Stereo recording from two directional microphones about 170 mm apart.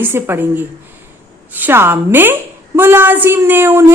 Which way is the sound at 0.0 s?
10° right (ahead or behind).